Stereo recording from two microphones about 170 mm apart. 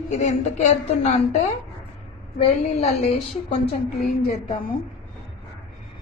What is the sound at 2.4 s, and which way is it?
A woman's voice, 35° left (ahead or behind).